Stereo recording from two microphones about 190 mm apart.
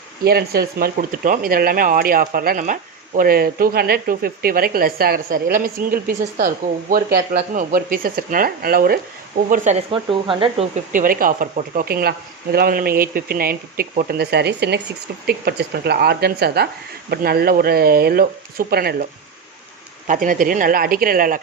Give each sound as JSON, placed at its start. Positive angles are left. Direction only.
{"t": 0.3, "sound": "speech", "side_deg": -55}
{"t": 9.5, "sound": "speech", "side_deg": -35}
{"t": 10.9, "sound": "a woman's voice", "side_deg": -45}
{"t": 20.1, "sound": "speech", "side_deg": -45}